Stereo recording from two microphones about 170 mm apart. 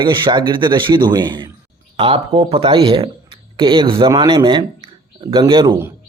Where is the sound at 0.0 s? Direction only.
30° right (ahead or behind).